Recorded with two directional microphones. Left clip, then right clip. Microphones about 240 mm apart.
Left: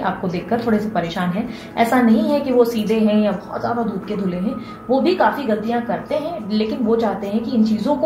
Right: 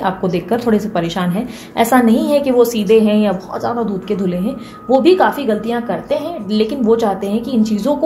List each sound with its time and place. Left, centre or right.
0.0 s a woman's voice: right
4.9 s a woman's voice: right